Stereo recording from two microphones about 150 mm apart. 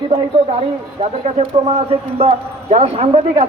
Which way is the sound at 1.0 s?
45° right (ahead or behind).